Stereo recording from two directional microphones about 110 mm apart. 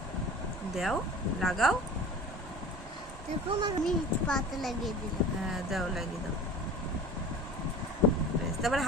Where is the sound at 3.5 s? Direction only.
45° right (ahead or behind).